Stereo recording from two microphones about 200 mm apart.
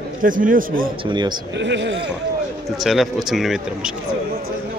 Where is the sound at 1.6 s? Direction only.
60° right (ahead or behind).